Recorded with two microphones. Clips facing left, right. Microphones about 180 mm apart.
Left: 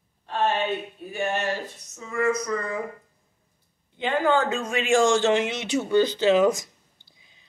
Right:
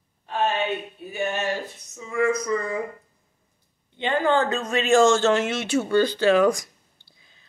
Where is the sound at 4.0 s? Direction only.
5° left (ahead or behind).